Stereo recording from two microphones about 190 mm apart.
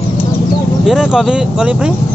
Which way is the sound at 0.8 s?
Centre (ahead or behind).